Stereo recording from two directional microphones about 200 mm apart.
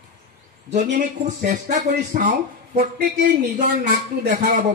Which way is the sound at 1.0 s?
35° right (ahead or behind).